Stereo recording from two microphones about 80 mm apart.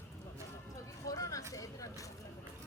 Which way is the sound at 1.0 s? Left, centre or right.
Left.